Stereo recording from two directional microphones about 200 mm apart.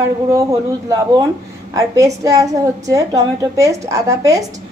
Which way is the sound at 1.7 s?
15° right (ahead or behind).